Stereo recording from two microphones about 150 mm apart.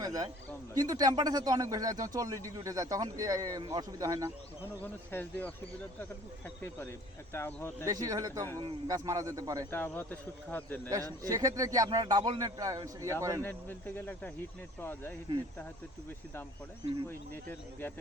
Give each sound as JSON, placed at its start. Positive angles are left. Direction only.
{"t": 0.0, "sound": "a man's voice", "side_deg": -25}
{"t": 4.8, "sound": "speech", "side_deg": 10}
{"t": 7.3, "sound": "speech", "side_deg": 15}
{"t": 7.9, "sound": "a man's voice", "side_deg": -25}
{"t": 9.7, "sound": "speech", "side_deg": 15}
{"t": 10.8, "sound": "a man's voice", "side_deg": -25}
{"t": 13.4, "sound": "speech", "side_deg": 15}
{"t": 17.1, "sound": "speech", "side_deg": 15}